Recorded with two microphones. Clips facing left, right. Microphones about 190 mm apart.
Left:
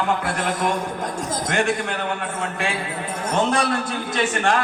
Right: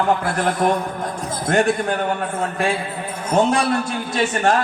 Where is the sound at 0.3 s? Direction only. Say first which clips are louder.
Right 4 dB; 40° right (ahead or behind).